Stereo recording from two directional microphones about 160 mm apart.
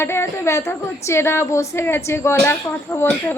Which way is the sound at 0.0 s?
15° left (ahead or behind).